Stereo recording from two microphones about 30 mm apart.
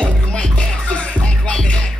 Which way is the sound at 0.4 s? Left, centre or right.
Left.